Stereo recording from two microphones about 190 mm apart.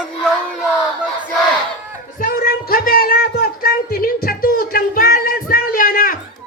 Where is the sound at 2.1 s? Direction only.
50° left (ahead or behind).